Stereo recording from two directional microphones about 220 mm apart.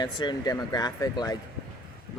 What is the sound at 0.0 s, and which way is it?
Speech, 20° left (ahead or behind).